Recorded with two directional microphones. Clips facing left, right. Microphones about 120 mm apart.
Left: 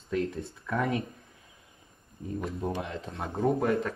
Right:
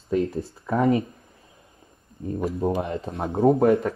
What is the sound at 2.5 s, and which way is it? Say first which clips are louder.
Speech: right 8 dB; 30° right (ahead or behind).